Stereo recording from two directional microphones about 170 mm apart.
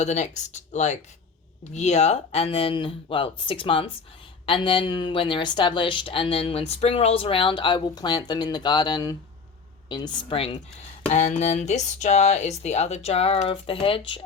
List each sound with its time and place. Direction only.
0.0 s a woman's voice: 45° left (ahead or behind)